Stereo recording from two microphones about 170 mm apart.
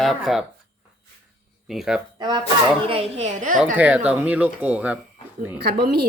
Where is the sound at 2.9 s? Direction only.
35° right (ahead or behind).